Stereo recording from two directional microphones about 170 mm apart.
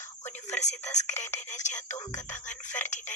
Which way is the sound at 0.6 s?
40° left (ahead or behind).